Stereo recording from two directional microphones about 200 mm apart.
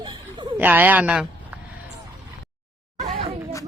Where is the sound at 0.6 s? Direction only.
10° right (ahead or behind).